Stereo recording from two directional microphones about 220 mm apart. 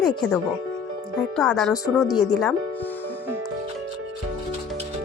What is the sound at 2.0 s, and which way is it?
Speech, 15° left (ahead or behind).